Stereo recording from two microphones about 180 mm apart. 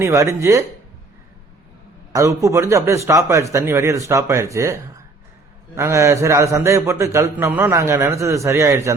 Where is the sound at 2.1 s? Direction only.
15° right (ahead or behind).